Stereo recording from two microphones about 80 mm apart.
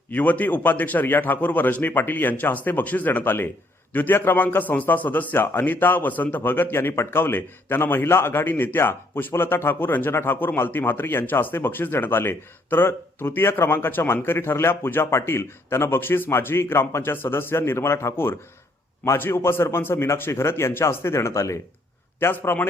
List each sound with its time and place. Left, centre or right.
0.1 s a man's voice: left
22.2 s a man's voice: left